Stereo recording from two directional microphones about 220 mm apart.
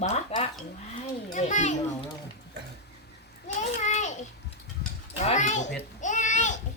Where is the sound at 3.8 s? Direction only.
35° left (ahead or behind).